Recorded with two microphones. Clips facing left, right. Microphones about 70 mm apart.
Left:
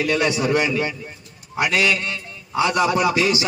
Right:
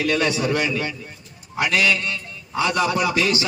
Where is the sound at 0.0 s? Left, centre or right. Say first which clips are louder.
Left 1 dB; centre.